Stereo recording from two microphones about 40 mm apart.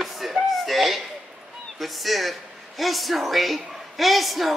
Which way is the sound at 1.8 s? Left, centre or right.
Centre.